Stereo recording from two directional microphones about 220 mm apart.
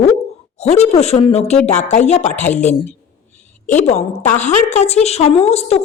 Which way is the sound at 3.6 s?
30° left (ahead or behind).